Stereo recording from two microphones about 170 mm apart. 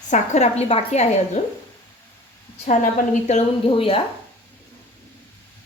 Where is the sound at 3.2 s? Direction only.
35° left (ahead or behind).